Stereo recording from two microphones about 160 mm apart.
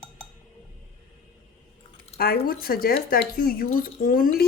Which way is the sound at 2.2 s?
65° left (ahead or behind).